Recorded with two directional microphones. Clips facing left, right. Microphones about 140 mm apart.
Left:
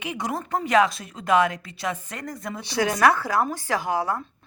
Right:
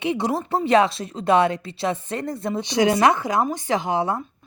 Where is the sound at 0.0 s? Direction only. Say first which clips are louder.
Right 6 dB; 30° right (ahead or behind).